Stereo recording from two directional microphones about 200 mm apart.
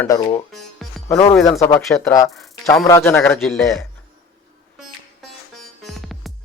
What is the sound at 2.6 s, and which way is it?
Speech, 15° left (ahead or behind).